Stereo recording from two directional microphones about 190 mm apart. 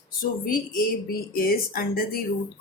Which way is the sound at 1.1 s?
50° left (ahead or behind).